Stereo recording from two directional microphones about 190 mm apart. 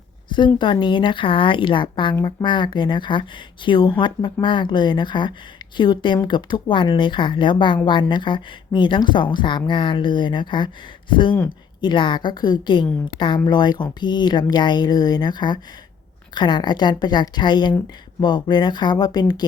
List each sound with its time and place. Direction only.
0.3 s a woman's voice: 25° left (ahead or behind)